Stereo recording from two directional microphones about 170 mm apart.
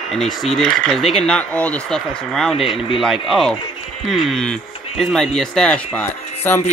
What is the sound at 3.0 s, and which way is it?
Speech, centre (ahead or behind).